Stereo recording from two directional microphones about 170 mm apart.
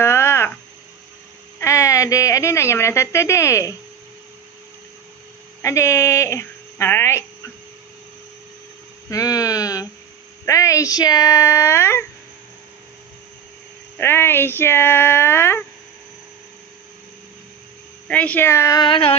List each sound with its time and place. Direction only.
0.0 s a sound: 15° left (ahead or behind)
1.5 s speech: 15° left (ahead or behind)
5.6 s speech: 15° left (ahead or behind)
9.0 s a sound: 20° left (ahead or behind)
10.4 s speech: 20° left (ahead or behind)
14.0 s speech: 15° left (ahead or behind)
18.1 s speech: 10° left (ahead or behind); by 19.1 s 30° left (ahead or behind)